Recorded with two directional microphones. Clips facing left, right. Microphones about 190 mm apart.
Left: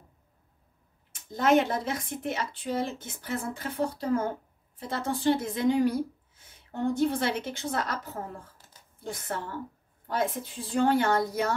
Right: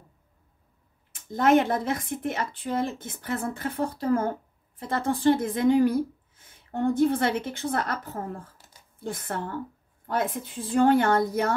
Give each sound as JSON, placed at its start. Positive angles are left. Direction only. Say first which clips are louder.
{"t": 1.3, "sound": "a woman's voice", "louder": "right 3 dB", "side_deg": -55}